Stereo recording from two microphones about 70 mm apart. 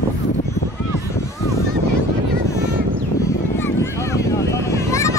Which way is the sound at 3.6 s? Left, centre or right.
Left.